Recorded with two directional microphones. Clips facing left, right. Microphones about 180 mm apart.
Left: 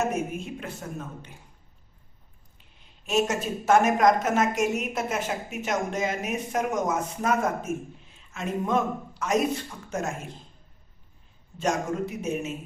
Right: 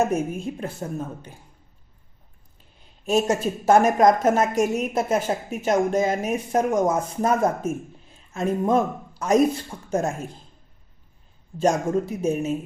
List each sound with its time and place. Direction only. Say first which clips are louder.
0.1 s a woman's voice: right 5 dB; 30° right (ahead or behind)
3.1 s a woman's voice: right 4 dB; 35° right (ahead or behind)
11.6 s a woman's voice: right 6 dB; 35° right (ahead or behind)